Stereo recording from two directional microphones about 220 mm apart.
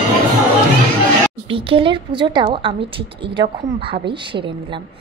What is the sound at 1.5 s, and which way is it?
A woman's voice, 25° right (ahead or behind).